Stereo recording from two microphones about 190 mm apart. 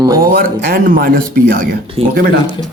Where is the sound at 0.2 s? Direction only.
50° right (ahead or behind).